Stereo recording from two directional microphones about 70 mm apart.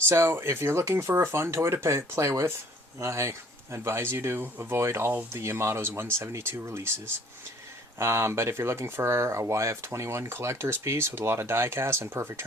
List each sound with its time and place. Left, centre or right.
0.1 s speech: right
7.9 s speech: right